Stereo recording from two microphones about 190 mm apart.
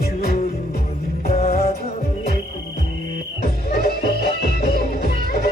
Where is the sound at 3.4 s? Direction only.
55° left (ahead or behind).